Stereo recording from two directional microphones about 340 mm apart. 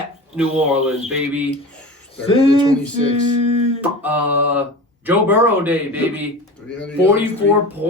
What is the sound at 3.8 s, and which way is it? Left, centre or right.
Speech, centre.